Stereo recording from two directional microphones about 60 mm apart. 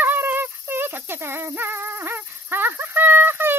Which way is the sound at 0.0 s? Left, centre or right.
Right.